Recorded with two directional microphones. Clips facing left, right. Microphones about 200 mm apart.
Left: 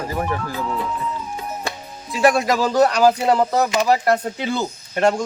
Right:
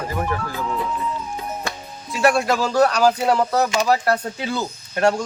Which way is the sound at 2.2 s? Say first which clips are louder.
Left 1 dB; 15° left (ahead or behind).